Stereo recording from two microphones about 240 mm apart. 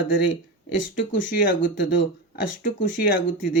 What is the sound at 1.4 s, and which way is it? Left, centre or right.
Speech, left.